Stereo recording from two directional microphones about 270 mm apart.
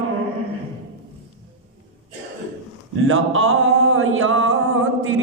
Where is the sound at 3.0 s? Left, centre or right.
Right.